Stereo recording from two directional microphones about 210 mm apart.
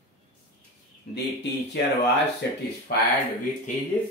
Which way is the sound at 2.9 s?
50° left (ahead or behind).